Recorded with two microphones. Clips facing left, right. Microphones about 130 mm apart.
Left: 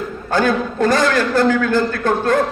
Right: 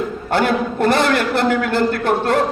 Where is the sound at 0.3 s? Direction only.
25° right (ahead or behind).